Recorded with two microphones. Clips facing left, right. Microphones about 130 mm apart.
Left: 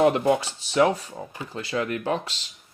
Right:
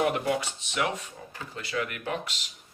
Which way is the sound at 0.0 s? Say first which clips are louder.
Left 7 dB; 30° left (ahead or behind).